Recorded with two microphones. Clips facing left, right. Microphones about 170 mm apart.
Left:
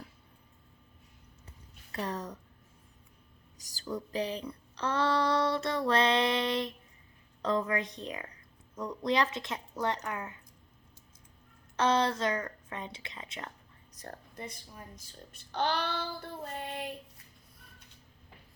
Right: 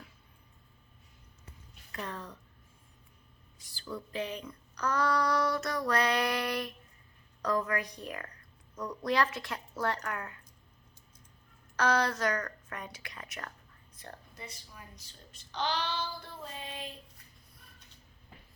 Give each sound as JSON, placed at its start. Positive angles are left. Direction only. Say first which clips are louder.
{"t": 1.9, "sound": "speech", "louder": "left 5 dB", "side_deg": 35}
{"t": 3.6, "sound": "speech", "louder": "left 4 dB", "side_deg": 40}
{"t": 11.8, "sound": "speech", "louder": "left 1 dB", "side_deg": 25}
{"t": 13.9, "sound": "speech", "louder": "left 4 dB", "side_deg": 45}
{"t": 15.5, "sound": "child singing", "louder": "left 2 dB", "side_deg": 55}